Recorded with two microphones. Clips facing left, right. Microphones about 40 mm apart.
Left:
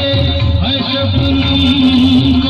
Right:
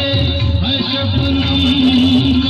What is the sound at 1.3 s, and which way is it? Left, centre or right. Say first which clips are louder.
Music: left 2 dB; centre.